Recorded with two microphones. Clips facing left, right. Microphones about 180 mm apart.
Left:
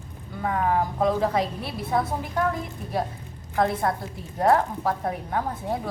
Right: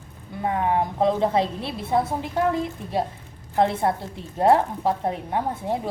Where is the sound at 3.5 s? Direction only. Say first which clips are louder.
Right 2 dB; 25° right (ahead or behind).